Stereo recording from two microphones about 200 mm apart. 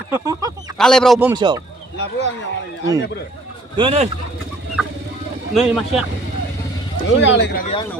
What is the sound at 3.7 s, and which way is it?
Speech, 30° right (ahead or behind).